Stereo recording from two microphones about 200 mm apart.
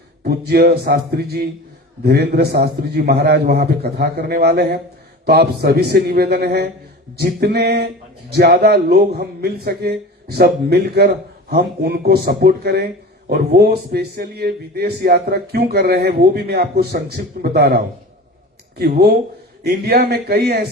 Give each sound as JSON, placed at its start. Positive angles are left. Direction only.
{"t": 0.2, "sound": "a man's voice", "side_deg": -50}
{"t": 18.8, "sound": "a man's voice", "side_deg": -55}